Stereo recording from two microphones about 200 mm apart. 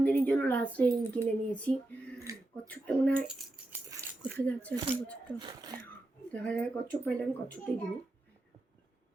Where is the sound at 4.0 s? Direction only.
15° right (ahead or behind).